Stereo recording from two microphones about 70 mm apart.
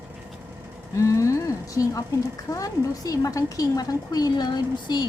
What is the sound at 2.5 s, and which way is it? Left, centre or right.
A woman's voice, left.